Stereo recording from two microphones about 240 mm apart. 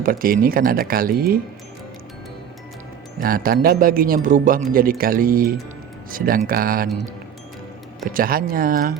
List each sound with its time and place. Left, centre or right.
0.0 s a man's voice: right
3.2 s a man's voice: right